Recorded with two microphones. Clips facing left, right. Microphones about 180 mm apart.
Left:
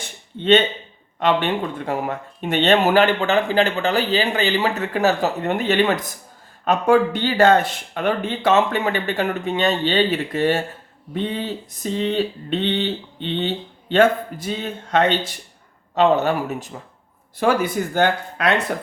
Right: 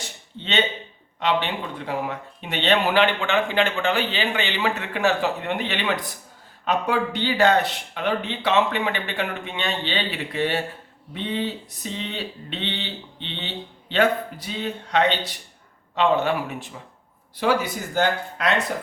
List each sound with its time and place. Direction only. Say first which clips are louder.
0.3 s speech: left 9 dB; 50° left (ahead or behind)